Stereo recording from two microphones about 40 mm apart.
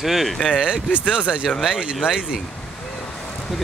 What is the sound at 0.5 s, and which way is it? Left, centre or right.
Speech, right.